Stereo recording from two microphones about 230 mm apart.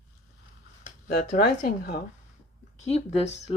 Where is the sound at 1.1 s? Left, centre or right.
Left.